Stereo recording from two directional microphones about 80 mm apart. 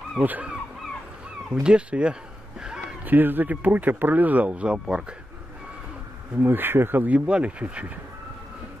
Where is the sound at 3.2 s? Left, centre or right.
Right.